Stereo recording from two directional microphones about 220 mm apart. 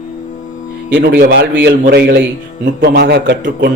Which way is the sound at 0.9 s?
45° right (ahead or behind).